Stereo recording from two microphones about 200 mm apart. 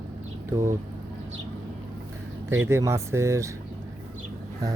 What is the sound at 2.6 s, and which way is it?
Speech, 15° right (ahead or behind).